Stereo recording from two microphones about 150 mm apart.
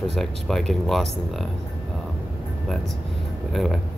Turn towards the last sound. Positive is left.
turn(degrees=0)  # may be behind; listen again after turning